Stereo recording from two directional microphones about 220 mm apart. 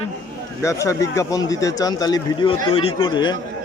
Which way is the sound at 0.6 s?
15° left (ahead or behind).